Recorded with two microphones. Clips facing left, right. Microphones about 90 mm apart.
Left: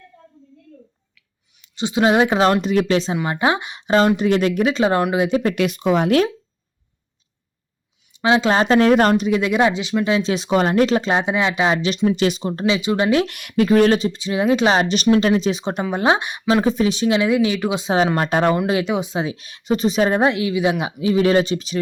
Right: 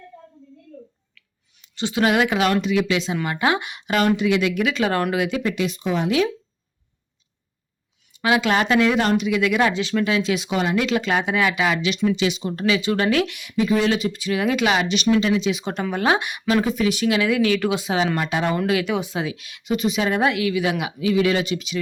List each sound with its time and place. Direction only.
1.1 s speech: 15° left (ahead or behind); by 3.2 s 35° left (ahead or behind)
3.2 s speech: 25° left (ahead or behind)
4.2 s speech: 45° left (ahead or behind); by 5.4 s 25° left (ahead or behind)
5.4 s speech: 55° left (ahead or behind)
8.1 s speech: 25° left (ahead or behind)
12.0 s speech: 45° left (ahead or behind)
12.4 s speech: 30° left (ahead or behind)
13.2 s speech: 50° left (ahead or behind)
14.0 s speech: 25° left (ahead or behind)
15.7 s speech: 20° left (ahead or behind)
18.2 s speech: 45° left (ahead or behind)
18.5 s speech: 25° left (ahead or behind)